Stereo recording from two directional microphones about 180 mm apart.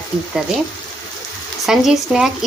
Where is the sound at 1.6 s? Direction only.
Centre (ahead or behind).